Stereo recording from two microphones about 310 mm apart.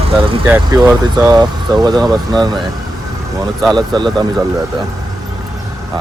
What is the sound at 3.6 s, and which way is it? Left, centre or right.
Speech, centre.